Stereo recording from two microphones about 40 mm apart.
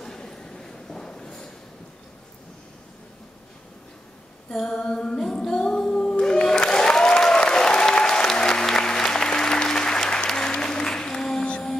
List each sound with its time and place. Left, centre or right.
0.0 s train: centre
4.5 s singing: centre
6.3 s applause: centre